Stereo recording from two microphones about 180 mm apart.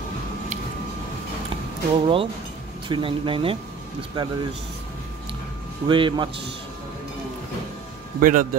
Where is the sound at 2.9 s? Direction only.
30° right (ahead or behind).